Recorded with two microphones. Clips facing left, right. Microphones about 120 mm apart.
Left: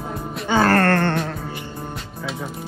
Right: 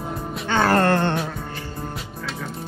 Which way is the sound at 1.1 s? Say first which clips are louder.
Left 2 dB; centre (ahead or behind).